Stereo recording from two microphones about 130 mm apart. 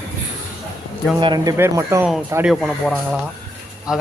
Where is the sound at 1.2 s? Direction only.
30° right (ahead or behind).